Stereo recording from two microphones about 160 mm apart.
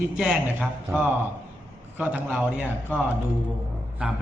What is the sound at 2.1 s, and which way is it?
Speech, 10° right (ahead or behind).